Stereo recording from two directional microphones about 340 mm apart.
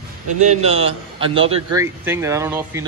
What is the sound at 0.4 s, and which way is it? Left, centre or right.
A man's voice, centre.